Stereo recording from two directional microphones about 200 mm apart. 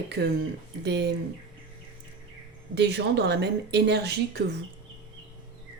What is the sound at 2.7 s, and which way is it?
Speech, 60° right (ahead or behind).